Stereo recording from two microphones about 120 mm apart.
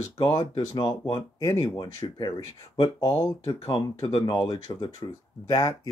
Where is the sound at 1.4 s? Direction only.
30° left (ahead or behind).